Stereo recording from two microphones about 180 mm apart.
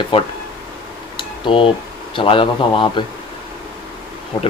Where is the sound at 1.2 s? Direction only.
30° left (ahead or behind).